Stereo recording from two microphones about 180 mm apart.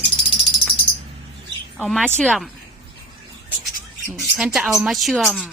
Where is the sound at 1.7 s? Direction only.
Centre (ahead or behind).